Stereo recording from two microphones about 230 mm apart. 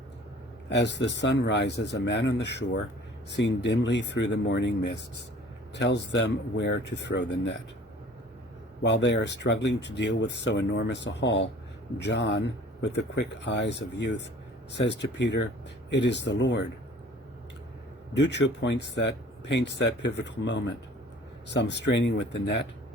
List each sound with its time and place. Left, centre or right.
0.7 s speech: left
8.8 s speech: left
18.1 s speech: left